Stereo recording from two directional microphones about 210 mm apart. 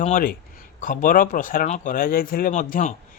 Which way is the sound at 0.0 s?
40° left (ahead or behind).